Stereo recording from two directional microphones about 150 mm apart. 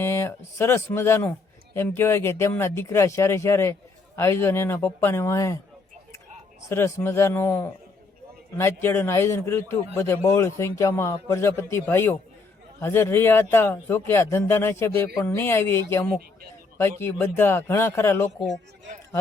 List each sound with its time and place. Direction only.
0.0 s speech: 15° left (ahead or behind)
6.7 s speech: 20° left (ahead or behind)